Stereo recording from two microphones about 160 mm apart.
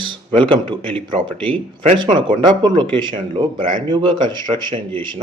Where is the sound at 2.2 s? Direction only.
30° right (ahead or behind).